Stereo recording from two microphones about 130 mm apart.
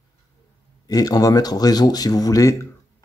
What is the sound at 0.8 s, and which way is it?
A man's voice, 30° left (ahead or behind).